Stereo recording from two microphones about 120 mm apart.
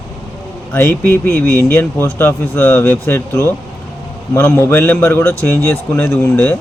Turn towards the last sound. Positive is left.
turn(degrees=10)  # may be behind; listen again after turning